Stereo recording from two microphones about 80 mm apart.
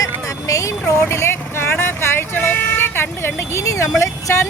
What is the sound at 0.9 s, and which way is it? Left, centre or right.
Speech, left.